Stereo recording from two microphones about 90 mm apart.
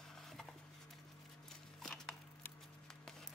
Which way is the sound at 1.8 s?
5° left (ahead or behind).